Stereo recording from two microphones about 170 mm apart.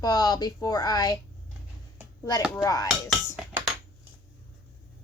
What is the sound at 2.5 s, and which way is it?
Speech, 20° left (ahead or behind).